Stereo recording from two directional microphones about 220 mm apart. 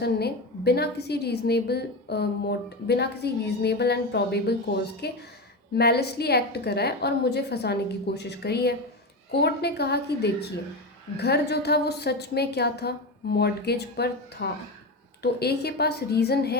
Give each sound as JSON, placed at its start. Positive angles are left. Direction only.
{"t": 0.0, "sound": "a woman's voice", "side_deg": 45}